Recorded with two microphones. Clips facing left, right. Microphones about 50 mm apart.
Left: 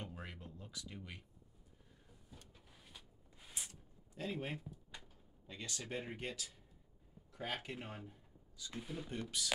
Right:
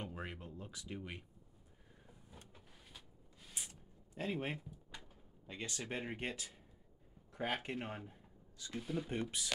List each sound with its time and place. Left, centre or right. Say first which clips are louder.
0.0 s a sound: right 4 dB; right
2.0 s vehicle: right 2 dB; right
4.3 s speech: right 3 dB; right
4.6 s drawer open or close: even; centre
5.5 s speech: right 2 dB; right
8.7 s speech: right 5 dB; centre
9.1 s speech: right 3 dB; right